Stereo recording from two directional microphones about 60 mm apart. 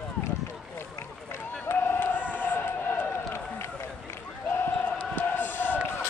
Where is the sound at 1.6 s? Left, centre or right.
Left.